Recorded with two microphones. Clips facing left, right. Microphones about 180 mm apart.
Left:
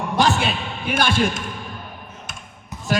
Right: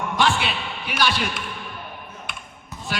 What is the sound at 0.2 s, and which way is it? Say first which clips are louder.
Speech: left 3 dB; 40° left (ahead or behind).